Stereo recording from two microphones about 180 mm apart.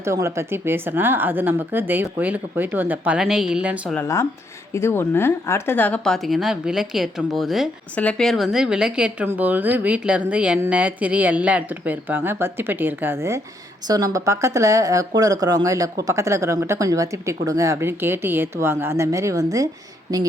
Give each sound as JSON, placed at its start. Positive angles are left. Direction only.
{"t": 0.0, "sound": "a woman's voice", "side_deg": -15}
{"t": 3.9, "sound": "a woman's voice", "side_deg": 15}